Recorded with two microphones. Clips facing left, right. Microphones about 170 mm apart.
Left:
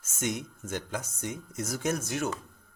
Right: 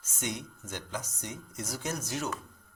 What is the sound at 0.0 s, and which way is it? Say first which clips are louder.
Speech: left 4 dB; 50° left (ahead or behind).